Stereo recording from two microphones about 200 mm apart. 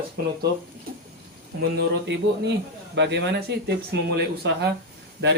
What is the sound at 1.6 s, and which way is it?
Speech, 60° right (ahead or behind).